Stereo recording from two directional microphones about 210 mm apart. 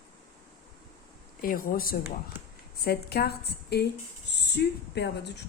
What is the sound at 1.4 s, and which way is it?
A woman's voice, 40° left (ahead or behind).